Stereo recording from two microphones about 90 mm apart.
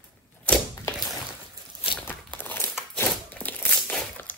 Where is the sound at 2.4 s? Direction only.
25° left (ahead or behind).